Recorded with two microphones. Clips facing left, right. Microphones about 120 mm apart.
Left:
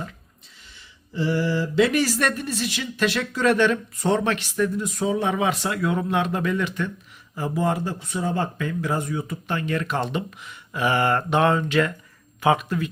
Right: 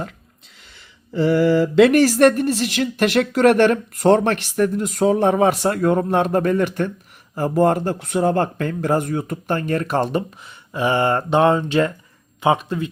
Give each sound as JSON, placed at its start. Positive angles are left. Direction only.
{"t": 1.5, "sound": "speech", "side_deg": -50}